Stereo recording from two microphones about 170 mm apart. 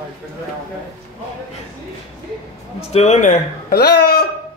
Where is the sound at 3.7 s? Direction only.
70° left (ahead or behind).